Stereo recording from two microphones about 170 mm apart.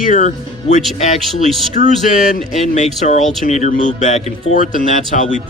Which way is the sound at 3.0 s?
45° left (ahead or behind).